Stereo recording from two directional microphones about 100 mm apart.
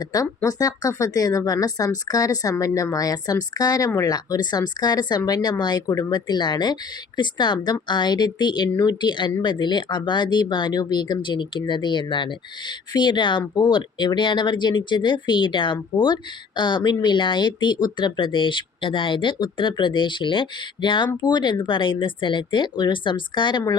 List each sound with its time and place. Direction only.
0.0 s speech: 40° left (ahead or behind); by 23.6 s 55° left (ahead or behind)